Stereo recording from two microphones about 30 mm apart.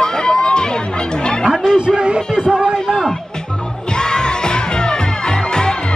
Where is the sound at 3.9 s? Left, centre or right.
Left.